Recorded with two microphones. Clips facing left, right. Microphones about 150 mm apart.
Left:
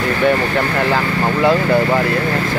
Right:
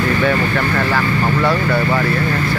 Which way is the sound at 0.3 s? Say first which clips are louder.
Left 1 dB; 20° left (ahead or behind).